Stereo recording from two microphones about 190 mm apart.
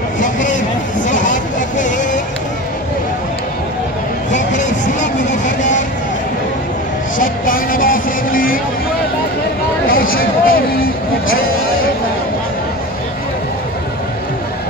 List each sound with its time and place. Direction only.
0.2 s vehicle: 40° left (ahead or behind)
4.6 s vehicle: 40° left (ahead or behind)
7.2 s music: 45° left (ahead or behind)
9.8 s a sound: 50° left (ahead or behind)